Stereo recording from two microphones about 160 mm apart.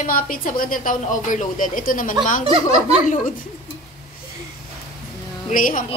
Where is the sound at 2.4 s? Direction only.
35° right (ahead or behind).